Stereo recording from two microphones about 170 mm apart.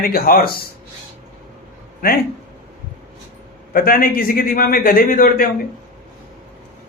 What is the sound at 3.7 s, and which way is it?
A man's voice, 60° left (ahead or behind).